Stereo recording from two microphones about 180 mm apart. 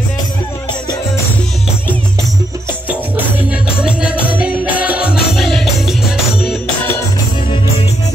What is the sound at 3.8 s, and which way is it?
Music, 5° right (ahead or behind).